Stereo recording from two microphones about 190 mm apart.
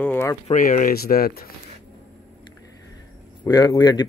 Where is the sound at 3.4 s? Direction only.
20° left (ahead or behind).